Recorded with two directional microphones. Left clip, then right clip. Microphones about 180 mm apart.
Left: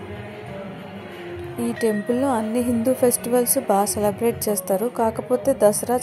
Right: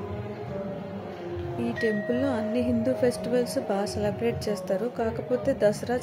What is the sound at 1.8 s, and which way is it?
Speech, 15° left (ahead or behind).